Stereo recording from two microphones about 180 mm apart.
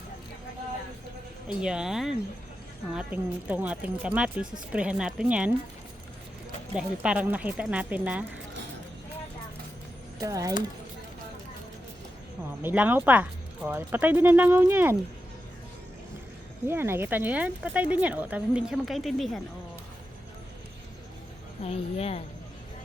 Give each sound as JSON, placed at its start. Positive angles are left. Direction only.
{"t": 1.6, "sound": "speech", "side_deg": -5}
{"t": 6.7, "sound": "speech", "side_deg": -5}
{"t": 10.2, "sound": "speech", "side_deg": -20}
{"t": 12.6, "sound": "speech", "side_deg": -10}
{"t": 16.6, "sound": "speech", "side_deg": -15}
{"t": 21.6, "sound": "a woman's voice", "side_deg": 35}